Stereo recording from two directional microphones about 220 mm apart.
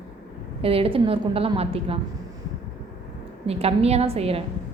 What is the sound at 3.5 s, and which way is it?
Speech, 25° right (ahead or behind).